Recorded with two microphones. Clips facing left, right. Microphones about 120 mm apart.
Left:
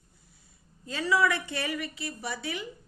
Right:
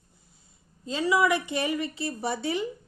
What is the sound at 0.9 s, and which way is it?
A woman's voice, 20° right (ahead or behind).